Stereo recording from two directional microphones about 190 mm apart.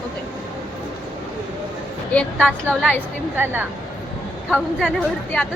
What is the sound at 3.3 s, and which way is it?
Speech, 10° right (ahead or behind).